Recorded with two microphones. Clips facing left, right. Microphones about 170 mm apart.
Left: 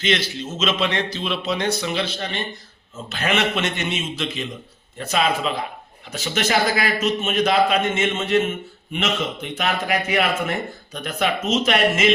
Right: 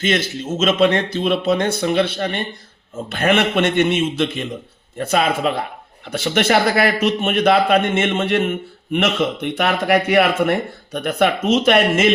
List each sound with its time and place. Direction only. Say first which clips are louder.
0.0 s a man's voice: right 3 dB; 50° right (ahead or behind)